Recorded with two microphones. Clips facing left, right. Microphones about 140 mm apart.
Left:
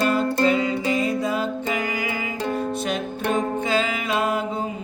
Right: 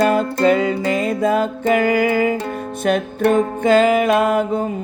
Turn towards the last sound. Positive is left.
turn(degrees=-55)  # may be behind; listen again after turning